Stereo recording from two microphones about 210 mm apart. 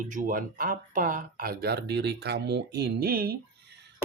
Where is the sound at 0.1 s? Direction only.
40° right (ahead or behind).